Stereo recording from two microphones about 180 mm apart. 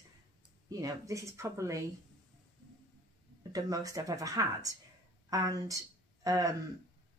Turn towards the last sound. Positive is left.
turn(degrees=-20)  # may be behind; listen again after turning